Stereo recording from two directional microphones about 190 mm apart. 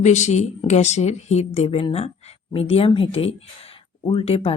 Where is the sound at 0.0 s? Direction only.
40° left (ahead or behind).